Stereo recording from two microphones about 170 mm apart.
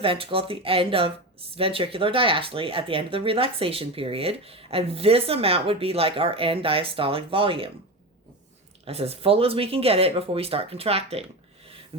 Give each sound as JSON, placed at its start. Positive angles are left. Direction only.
{"t": 0.0, "sound": "speech", "side_deg": -35}
{"t": 8.8, "sound": "speech", "side_deg": -35}